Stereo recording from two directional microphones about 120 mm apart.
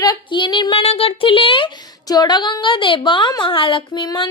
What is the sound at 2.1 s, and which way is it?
A woman's voice, 35° left (ahead or behind).